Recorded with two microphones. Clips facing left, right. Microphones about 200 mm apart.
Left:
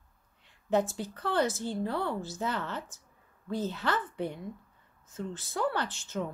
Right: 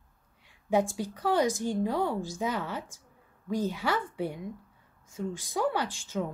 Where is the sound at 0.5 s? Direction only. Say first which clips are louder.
Right 1 dB; 10° right (ahead or behind).